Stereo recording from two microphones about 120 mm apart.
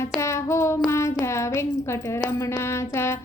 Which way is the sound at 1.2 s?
25° left (ahead or behind).